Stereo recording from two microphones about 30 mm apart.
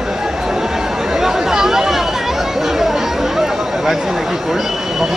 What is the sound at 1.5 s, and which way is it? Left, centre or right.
Chatter, centre.